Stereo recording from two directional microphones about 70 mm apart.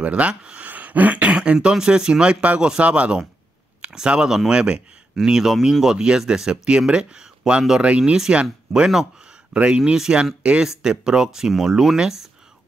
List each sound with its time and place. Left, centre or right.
0.0 s speech: centre
0.7 s speech: right; by 12.3 s centre